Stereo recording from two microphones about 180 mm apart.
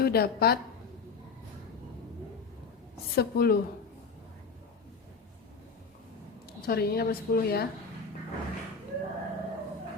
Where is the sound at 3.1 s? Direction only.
60° left (ahead or behind).